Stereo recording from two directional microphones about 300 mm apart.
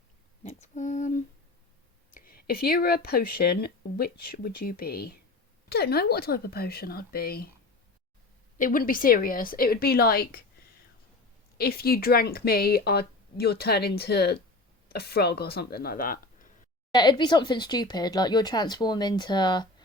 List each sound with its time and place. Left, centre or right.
0.4 s a sound: left
2.1 s speech: left
8.5 s speech: left
11.5 s speech: left
16.9 s speech: centre